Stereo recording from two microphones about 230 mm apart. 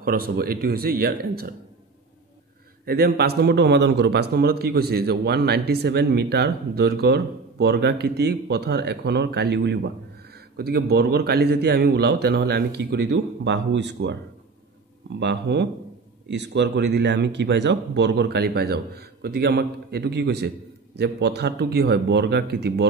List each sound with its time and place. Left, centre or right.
0.0 s a man's voice: right
2.8 s a man's voice: right
15.1 s a man's voice: right